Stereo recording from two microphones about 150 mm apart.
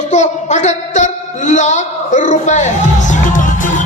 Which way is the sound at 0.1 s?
50° left (ahead or behind).